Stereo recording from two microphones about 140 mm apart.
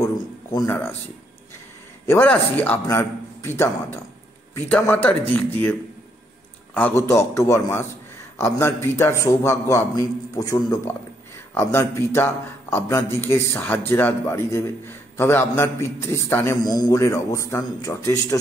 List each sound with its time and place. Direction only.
0.0 s a sound: 25° left (ahead or behind)
0.7 s a man's voice: 15° left (ahead or behind)
2.0 s a man's voice: 15° left (ahead or behind)